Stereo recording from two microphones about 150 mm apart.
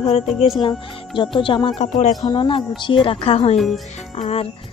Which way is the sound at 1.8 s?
50° left (ahead or behind).